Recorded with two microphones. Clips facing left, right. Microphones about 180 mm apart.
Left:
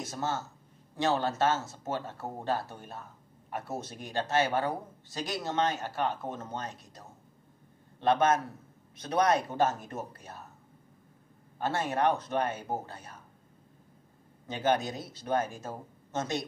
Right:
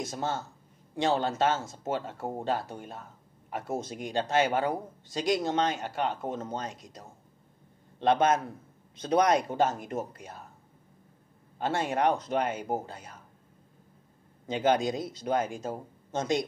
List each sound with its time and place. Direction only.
0.0 s speech: 15° right (ahead or behind)
8.0 s a man's voice: 20° right (ahead or behind)
11.6 s speech: 15° right (ahead or behind)
14.5 s speech: 20° right (ahead or behind)